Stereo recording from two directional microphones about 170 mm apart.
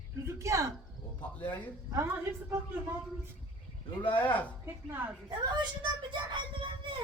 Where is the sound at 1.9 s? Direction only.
15° right (ahead or behind).